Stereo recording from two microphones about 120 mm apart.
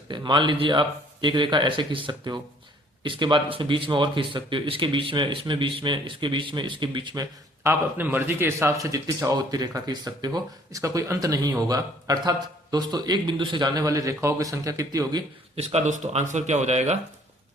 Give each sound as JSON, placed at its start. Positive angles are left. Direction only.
{"t": 0.1, "sound": "a man's voice", "side_deg": -40}
{"t": 7.6, "sound": "a man's voice", "side_deg": -15}
{"t": 15.5, "sound": "speech", "side_deg": -65}